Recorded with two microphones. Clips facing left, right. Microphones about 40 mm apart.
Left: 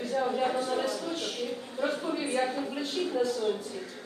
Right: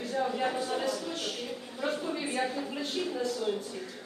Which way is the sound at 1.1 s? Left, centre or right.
Left.